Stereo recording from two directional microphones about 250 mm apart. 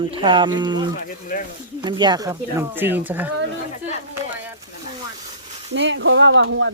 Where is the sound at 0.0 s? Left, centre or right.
Centre.